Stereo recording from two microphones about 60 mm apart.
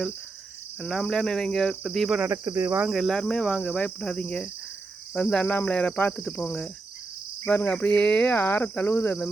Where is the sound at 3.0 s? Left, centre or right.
Centre.